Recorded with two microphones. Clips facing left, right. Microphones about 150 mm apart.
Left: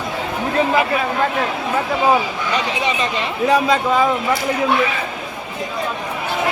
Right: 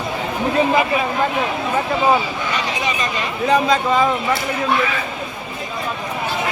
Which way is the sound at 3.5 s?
10° left (ahead or behind).